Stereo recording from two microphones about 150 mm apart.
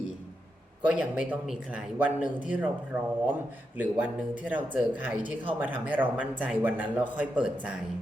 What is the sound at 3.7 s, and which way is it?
Speech, 10° right (ahead or behind).